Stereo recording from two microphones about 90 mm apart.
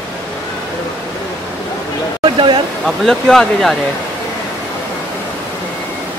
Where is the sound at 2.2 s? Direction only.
65° right (ahead or behind).